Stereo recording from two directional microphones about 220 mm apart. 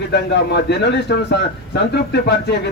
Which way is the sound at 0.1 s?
50° left (ahead or behind).